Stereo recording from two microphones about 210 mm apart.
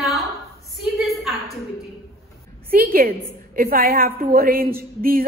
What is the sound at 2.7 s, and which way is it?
A woman's voice, 45° right (ahead or behind).